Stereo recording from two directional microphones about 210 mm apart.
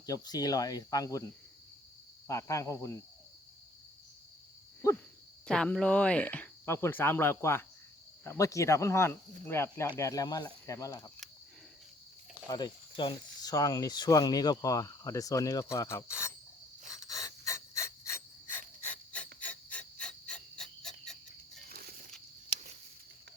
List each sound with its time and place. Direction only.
0.0 s speech: 15° left (ahead or behind)
2.2 s speech: 15° left (ahead or behind)
5.5 s speech: 5° left (ahead or behind)
12.5 s speech: 20° left (ahead or behind)
17.2 s a sound: 15° left (ahead or behind)
19.1 s insect: 5° left (ahead or behind)
21.7 s a sound: 45° right (ahead or behind)